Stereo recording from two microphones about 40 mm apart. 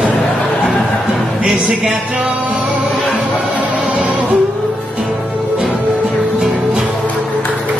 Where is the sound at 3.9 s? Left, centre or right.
Right.